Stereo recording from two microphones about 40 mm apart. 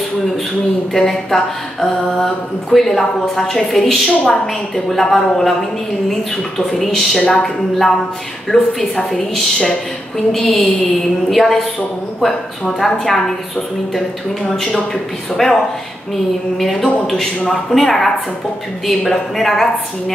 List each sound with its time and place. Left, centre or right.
0.9 s speech: centre
4.2 s a woman's voice: centre
6.7 s a woman's voice: centre
14.5 s a woman's voice: centre